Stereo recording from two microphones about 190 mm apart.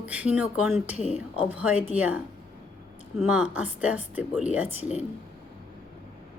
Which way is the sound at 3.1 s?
5° right (ahead or behind).